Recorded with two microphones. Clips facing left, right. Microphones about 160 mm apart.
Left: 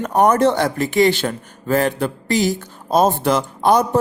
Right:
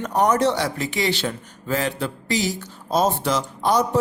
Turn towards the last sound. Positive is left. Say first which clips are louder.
# left 5 dB
turn(degrees=55)  # may be behind; listen again after turning